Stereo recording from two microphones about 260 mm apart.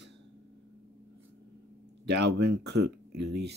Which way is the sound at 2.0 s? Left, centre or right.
Right.